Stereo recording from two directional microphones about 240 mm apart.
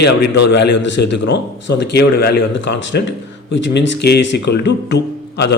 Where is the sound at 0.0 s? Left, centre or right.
Left.